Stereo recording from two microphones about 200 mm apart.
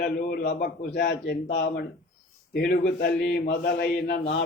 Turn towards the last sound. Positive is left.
turn(degrees=55)  # may be behind; listen again after turning